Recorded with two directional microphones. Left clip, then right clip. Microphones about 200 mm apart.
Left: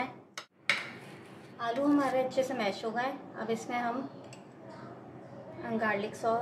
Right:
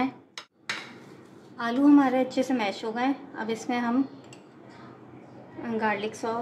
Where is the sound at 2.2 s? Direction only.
50° right (ahead or behind).